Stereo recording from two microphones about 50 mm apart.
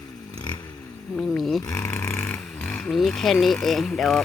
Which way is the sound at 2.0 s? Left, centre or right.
Centre.